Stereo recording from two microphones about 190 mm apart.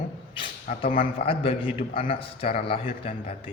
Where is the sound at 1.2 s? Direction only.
30° left (ahead or behind).